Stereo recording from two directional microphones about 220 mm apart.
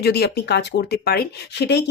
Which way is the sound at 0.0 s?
45° left (ahead or behind).